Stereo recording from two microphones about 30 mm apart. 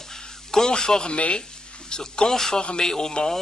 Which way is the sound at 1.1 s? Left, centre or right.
Left.